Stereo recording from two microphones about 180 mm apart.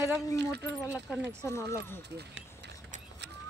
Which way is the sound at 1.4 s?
15° left (ahead or behind).